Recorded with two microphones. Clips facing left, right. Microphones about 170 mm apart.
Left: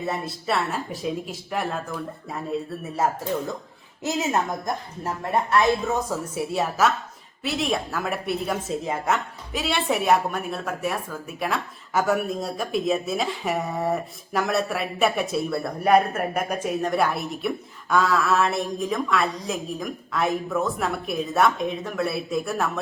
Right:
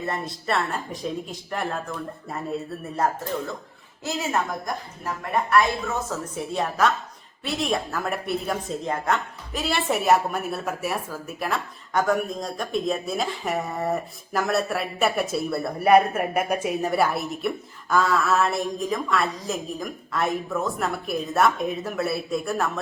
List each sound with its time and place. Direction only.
0.0 s speech: centre (ahead or behind)
4.0 s a woman's voice: 20° left (ahead or behind)
6.1 s speech: 5° left (ahead or behind)